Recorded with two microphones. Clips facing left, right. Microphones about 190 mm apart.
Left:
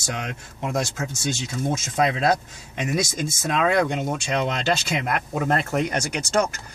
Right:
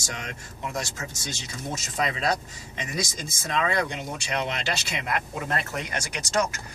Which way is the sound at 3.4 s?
55° left (ahead or behind).